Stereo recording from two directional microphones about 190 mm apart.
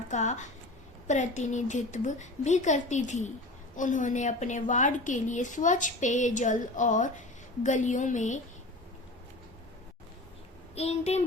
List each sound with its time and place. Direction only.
0.1 s a woman's voice: 40° left (ahead or behind)
10.8 s a woman's voice: 35° left (ahead or behind)